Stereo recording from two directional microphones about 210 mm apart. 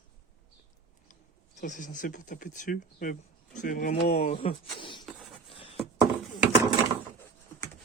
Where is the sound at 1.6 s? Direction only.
35° left (ahead or behind).